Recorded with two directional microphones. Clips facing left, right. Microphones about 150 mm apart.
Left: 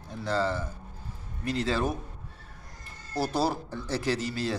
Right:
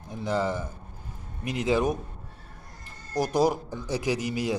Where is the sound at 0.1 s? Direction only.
15° right (ahead or behind).